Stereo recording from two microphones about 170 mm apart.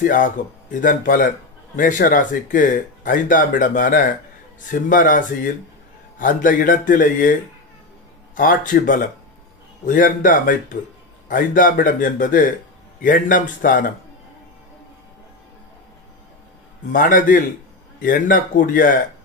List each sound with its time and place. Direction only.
0.0 s speech: 50° left (ahead or behind)
8.4 s speech: 50° left (ahead or behind)
16.9 s speech: 55° left (ahead or behind)